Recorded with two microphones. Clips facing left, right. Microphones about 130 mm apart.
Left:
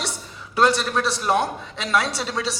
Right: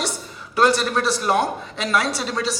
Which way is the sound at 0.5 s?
Centre (ahead or behind).